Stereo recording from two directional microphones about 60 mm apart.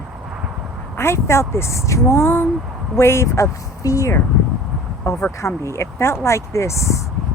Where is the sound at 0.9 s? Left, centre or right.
Left.